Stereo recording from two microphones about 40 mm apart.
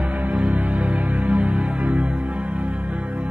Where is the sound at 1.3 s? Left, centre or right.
Right.